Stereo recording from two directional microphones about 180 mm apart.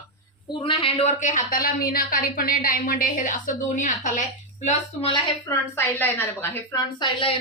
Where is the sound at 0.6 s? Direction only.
30° left (ahead or behind).